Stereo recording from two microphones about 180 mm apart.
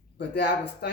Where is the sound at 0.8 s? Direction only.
60° left (ahead or behind).